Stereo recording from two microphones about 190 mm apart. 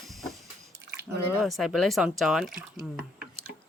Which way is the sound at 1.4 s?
Centre (ahead or behind).